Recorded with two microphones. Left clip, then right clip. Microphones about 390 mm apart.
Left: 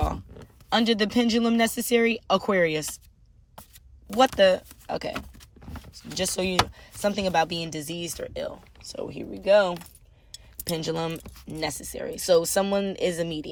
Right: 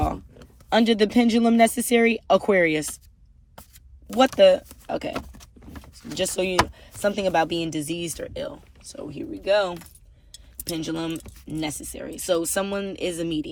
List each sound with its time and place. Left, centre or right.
0.7 s speech: centre
4.1 s speech: centre
6.0 s speech: centre
6.3 s speech: centre